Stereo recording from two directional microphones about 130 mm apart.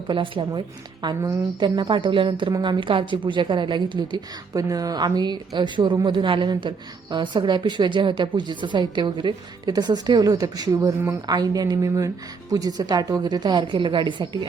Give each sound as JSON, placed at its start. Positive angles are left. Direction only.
{"t": 0.1, "sound": "a woman's voice", "side_deg": -40}